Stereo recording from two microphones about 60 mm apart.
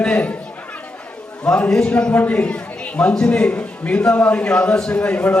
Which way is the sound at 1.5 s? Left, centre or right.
Centre.